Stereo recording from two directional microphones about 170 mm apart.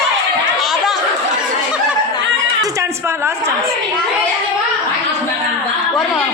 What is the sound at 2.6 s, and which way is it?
Speech, 15° right (ahead or behind).